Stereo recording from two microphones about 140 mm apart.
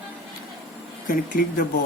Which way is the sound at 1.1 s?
90° left.